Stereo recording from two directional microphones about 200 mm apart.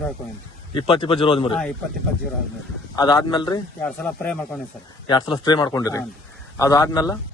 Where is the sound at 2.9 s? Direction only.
20° left (ahead or behind).